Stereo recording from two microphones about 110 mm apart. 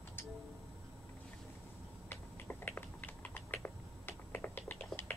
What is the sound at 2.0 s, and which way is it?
Typing, 15° left (ahead or behind).